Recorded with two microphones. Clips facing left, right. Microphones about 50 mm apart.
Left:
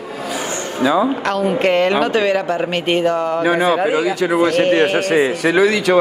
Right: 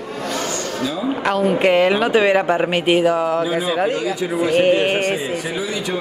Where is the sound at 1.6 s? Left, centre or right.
Centre.